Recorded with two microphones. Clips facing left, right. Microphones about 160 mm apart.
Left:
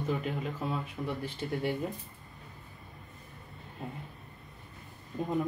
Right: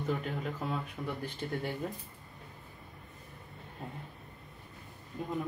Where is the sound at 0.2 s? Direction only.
5° left (ahead or behind).